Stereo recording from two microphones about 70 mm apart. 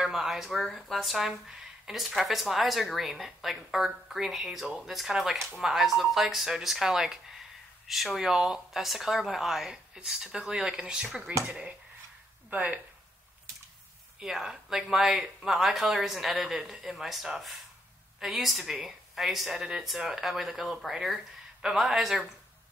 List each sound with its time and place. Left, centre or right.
0.0 s speech: centre; by 12.8 s right
14.2 s speech: centre